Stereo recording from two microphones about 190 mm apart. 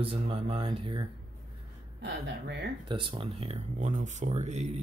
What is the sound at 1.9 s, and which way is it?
Speech, 65° right (ahead or behind).